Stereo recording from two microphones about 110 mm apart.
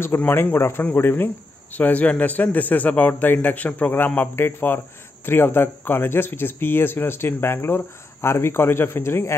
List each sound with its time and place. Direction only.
0.0 s speech: 20° left (ahead or behind)